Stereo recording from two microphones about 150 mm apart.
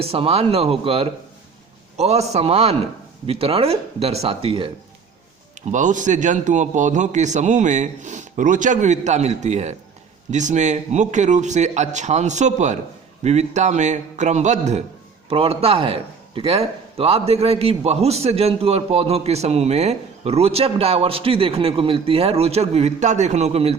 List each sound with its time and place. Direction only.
0.0 s a man's voice: 40° right (ahead or behind)
5.6 s a man's voice: 55° right (ahead or behind)